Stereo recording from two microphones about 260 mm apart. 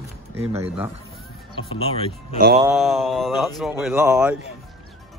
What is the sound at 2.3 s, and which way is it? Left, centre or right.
Speech, right.